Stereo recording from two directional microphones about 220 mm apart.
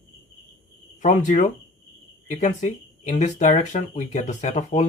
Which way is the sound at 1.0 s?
35° left (ahead or behind).